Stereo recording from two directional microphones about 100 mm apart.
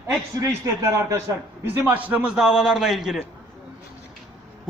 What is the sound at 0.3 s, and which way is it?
Speech, 35° right (ahead or behind).